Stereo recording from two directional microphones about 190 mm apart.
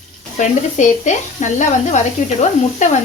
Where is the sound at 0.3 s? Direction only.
40° left (ahead or behind).